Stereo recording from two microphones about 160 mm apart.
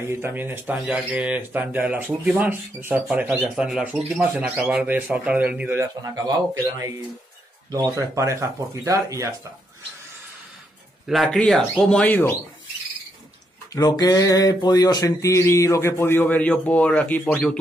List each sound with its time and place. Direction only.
0.0 s speech: 15° right (ahead or behind)
5.8 s speech: 25° right (ahead or behind)
11.1 s speech: centre (ahead or behind)
13.7 s a sound: 25° left (ahead or behind); by 17.6 s 5° left (ahead or behind)